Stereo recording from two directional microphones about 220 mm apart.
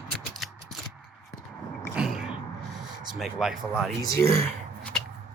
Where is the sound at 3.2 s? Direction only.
Centre (ahead or behind).